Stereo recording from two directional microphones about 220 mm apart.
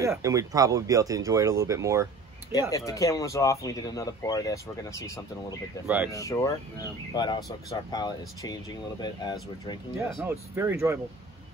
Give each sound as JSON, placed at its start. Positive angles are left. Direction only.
{"t": 0.0, "sound": "speech", "side_deg": -15}
{"t": 2.7, "sound": "speech", "side_deg": 15}
{"t": 10.1, "sound": "speech", "side_deg": -10}